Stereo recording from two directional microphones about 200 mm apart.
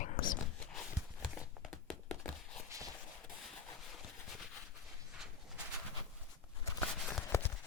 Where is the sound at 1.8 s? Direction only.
5° left (ahead or behind).